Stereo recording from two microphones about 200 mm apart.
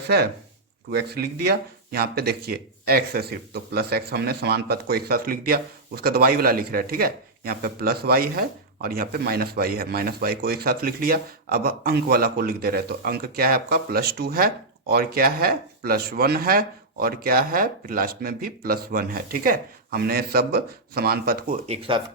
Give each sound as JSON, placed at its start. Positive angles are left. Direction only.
{"t": 0.9, "sound": "speech", "side_deg": -55}
{"t": 21.7, "sound": "speech", "side_deg": -25}